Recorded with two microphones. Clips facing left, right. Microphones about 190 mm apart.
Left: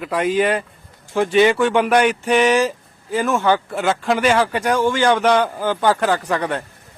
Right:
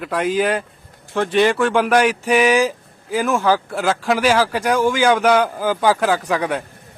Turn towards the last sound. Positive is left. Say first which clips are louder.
# right 1 dB
turn(degrees=-5)  # may be behind; listen again after turning